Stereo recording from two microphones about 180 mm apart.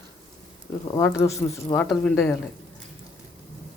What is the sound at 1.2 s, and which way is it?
Speech, 20° left (ahead or behind).